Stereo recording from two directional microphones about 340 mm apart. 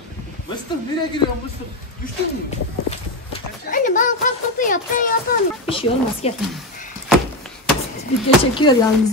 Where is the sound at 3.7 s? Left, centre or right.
Left.